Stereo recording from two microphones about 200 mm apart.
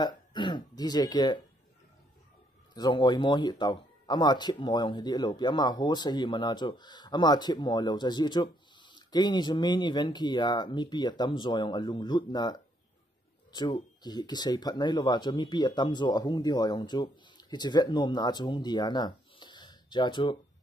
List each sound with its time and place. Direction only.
0.0 s speech: 20° left (ahead or behind)
2.7 s speech: 20° left (ahead or behind)